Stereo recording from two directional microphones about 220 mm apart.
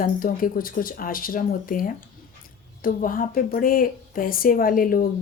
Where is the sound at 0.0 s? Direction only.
40° left (ahead or behind).